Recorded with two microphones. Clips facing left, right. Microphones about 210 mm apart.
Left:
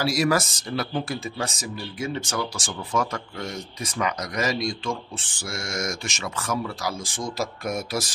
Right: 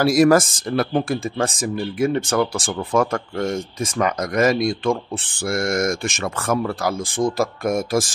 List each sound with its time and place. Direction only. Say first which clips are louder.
0.0 s speech: right 8 dB; 50° right (ahead or behind)